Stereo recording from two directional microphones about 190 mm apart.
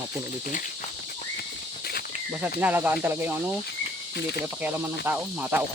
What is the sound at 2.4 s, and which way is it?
Speech, 10° right (ahead or behind).